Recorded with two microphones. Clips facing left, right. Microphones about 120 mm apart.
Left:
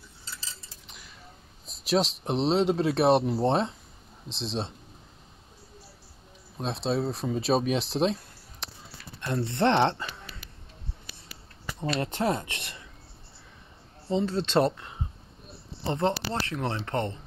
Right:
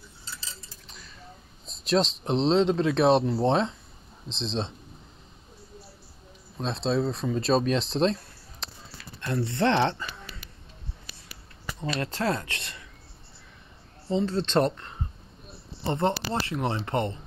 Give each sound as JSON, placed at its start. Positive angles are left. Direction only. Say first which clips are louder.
{"t": 1.7, "sound": "speech", "louder": "right 1 dB", "side_deg": 5}
{"t": 6.6, "sound": "speech", "louder": "right 2 dB", "side_deg": 10}
{"t": 9.2, "sound": "speech", "louder": "even", "side_deg": 20}
{"t": 12.0, "sound": "speech", "louder": "even", "side_deg": 20}
{"t": 14.2, "sound": "speech", "louder": "even", "side_deg": 10}
{"t": 15.8, "sound": "speech", "louder": "right 1 dB", "side_deg": -5}